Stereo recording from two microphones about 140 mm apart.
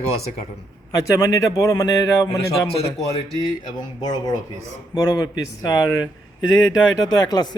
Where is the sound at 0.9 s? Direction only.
25° left (ahead or behind).